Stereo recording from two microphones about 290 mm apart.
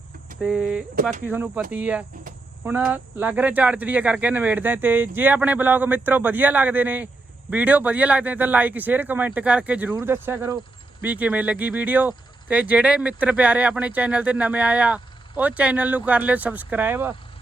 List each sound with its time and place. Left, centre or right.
0.4 s speech: centre